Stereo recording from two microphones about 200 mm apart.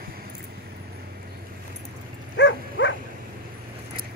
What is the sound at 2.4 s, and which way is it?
Dog, 60° left (ahead or behind).